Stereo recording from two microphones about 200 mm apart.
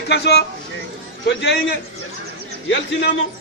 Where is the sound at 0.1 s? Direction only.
55° left (ahead or behind).